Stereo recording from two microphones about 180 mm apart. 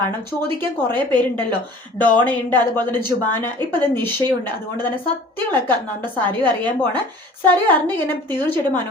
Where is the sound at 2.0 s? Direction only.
10° left (ahead or behind).